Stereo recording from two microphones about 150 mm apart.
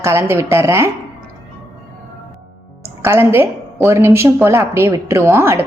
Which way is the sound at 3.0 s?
15° right (ahead or behind).